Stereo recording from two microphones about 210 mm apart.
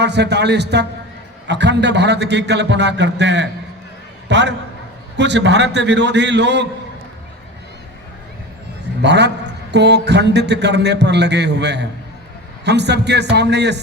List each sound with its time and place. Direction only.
0.0 s a man's voice: 55° right (ahead or behind)
9.0 s a man's voice: 55° right (ahead or behind)